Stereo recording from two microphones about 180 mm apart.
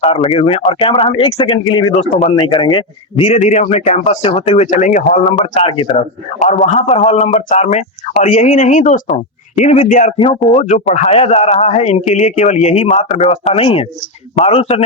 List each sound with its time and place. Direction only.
0.0 s a man's voice: 35° left (ahead or behind)
2.3 s a man's voice: 25° left (ahead or behind)
3.2 s a man's voice: 40° left (ahead or behind)
6.4 s a man's voice: 40° left (ahead or behind)